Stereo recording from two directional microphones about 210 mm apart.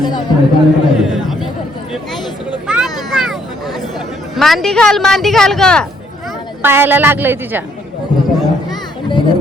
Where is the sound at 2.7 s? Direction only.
Centre (ahead or behind).